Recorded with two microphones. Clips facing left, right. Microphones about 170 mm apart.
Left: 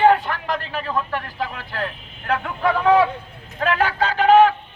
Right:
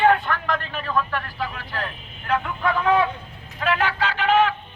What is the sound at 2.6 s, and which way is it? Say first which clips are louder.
Speech: left 5 dB; 30° left (ahead or behind).